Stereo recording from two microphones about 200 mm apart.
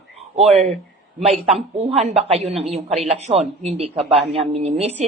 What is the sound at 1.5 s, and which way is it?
A woman's voice, 30° right (ahead or behind).